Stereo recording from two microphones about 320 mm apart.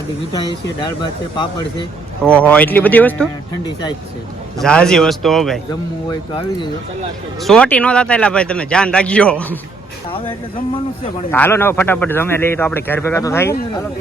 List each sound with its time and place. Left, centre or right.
2.2 s speech: centre
6.1 s a man's voice: centre
7.4 s speech: centre
10.1 s a man's voice: centre